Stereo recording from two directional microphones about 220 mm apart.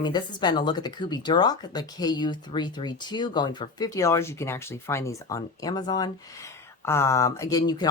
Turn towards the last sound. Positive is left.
turn(degrees=20)  # may be behind; listen again after turning